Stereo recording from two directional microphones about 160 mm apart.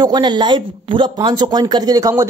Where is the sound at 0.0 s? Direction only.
25° right (ahead or behind).